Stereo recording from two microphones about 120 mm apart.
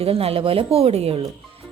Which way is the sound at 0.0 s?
55° right (ahead or behind).